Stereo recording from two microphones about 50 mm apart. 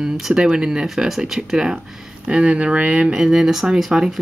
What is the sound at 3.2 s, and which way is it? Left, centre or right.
Speech, centre.